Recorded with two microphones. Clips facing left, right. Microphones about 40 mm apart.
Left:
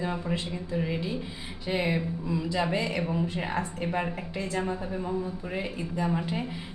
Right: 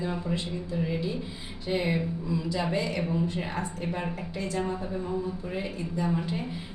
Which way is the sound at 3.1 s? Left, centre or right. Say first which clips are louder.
Even; left.